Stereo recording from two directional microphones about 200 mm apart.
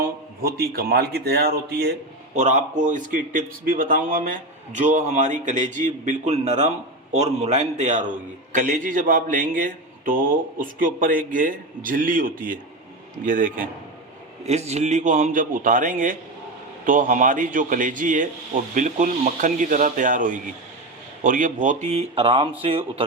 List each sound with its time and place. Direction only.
0.0 s a man's voice: 50° right (ahead or behind)
2.3 s a man's voice: 35° right (ahead or behind)